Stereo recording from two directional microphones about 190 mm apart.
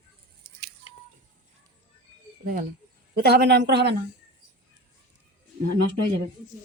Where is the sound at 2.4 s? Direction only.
50° right (ahead or behind).